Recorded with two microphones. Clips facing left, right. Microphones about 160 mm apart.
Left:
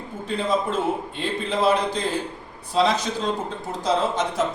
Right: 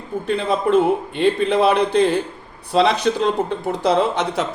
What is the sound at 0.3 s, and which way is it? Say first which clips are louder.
A man's voice: right 5 dB; 65° right (ahead or behind).